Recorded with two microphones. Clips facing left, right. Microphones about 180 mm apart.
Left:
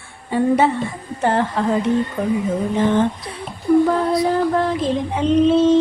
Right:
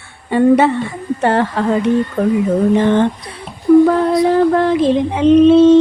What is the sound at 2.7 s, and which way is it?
Speech, 70° right (ahead or behind).